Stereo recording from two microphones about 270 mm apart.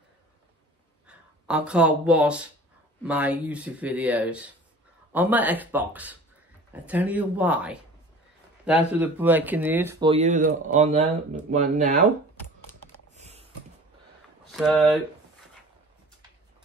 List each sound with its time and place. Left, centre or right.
1.0 s speech: centre; by 12.0 s right
13.1 s typing: right
14.5 s a sound: centre